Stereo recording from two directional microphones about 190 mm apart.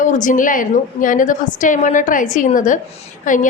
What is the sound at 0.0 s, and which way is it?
A woman's voice, 40° left (ahead or behind).